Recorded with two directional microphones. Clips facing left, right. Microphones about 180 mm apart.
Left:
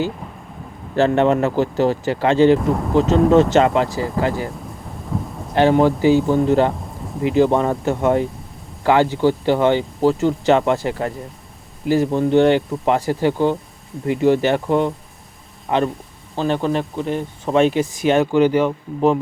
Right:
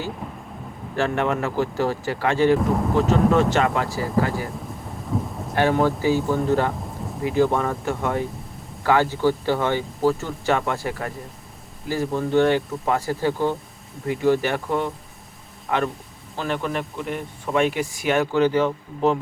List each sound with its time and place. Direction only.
0.9 s speech: 30° left (ahead or behind)
5.1 s thunder: centre (ahead or behind)
5.5 s speech: 20° left (ahead or behind)